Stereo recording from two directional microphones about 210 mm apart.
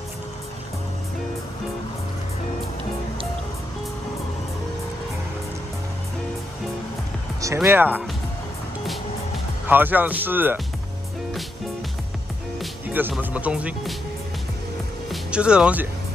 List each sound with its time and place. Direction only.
7.4 s speech: 10° right (ahead or behind)
9.7 s speech: 10° right (ahead or behind)
12.5 s speech: 10° right (ahead or behind)
15.0 s speech: 5° right (ahead or behind)